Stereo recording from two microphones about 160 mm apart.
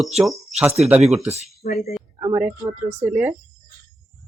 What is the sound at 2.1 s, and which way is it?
Speech, 15° right (ahead or behind).